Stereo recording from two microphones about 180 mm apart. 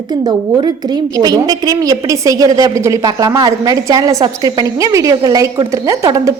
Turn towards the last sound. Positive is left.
turn(degrees=-20)  # may be behind; listen again after turning